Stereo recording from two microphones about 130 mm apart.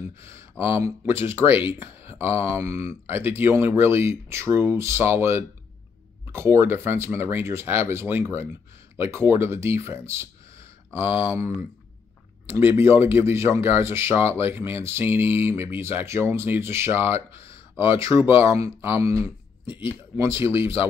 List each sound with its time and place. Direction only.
0.2 s speech: 20° right (ahead or behind)